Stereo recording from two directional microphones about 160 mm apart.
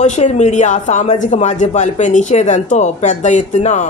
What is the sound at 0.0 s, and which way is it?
A man's voice, 45° left (ahead or behind).